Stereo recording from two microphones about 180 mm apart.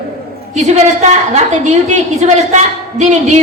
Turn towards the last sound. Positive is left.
turn(degrees=-40)  # may be behind; listen again after turning